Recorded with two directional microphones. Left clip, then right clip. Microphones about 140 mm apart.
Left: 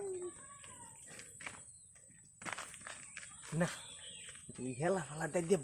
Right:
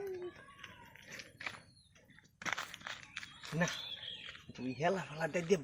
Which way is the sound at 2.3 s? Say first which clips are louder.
Right 5 dB; 35° right (ahead or behind).